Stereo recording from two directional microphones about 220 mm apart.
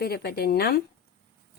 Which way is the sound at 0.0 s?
45° left (ahead or behind).